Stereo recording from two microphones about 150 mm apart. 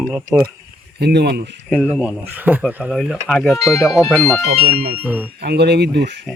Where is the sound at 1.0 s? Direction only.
90° right.